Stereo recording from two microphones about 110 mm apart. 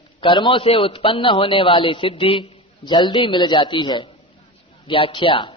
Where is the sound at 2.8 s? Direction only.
40° left (ahead or behind).